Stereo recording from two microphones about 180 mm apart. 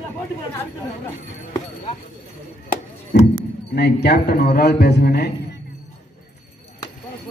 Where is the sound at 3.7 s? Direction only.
65° left (ahead or behind).